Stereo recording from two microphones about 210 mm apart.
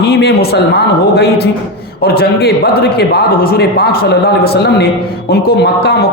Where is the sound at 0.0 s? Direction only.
50° left (ahead or behind).